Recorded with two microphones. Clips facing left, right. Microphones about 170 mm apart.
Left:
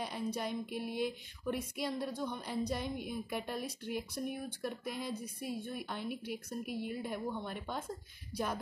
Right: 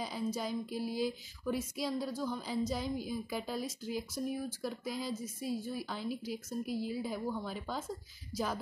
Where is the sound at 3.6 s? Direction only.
60° left (ahead or behind).